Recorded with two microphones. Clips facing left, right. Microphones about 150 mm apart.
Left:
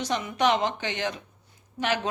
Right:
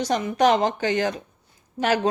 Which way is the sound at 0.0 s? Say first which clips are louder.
Right 5 dB; 35° right (ahead or behind).